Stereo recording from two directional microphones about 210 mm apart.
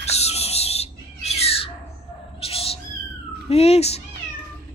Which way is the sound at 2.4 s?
30° left (ahead or behind).